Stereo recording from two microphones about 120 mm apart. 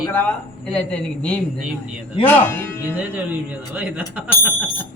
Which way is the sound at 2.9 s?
15° right (ahead or behind).